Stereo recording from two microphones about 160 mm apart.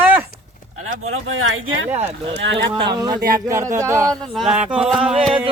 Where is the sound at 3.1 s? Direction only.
60° right (ahead or behind).